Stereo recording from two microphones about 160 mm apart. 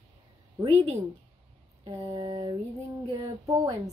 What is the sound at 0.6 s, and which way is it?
Speech, 35° right (ahead or behind).